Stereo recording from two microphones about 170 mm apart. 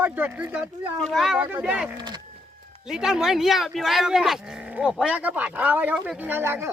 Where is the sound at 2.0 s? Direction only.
25° right (ahead or behind).